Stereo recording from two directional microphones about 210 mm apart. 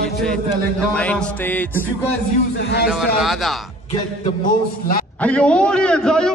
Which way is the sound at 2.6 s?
55° left (ahead or behind).